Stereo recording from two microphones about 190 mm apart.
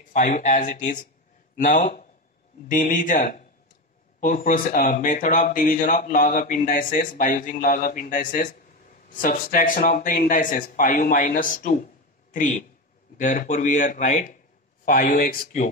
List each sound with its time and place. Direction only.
0.1 s speech: 40° left (ahead or behind)